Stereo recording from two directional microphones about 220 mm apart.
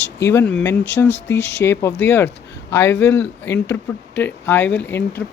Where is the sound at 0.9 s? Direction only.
50° left (ahead or behind).